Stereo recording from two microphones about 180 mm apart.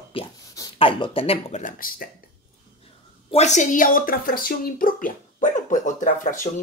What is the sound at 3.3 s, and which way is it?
Speech, 40° left (ahead or behind).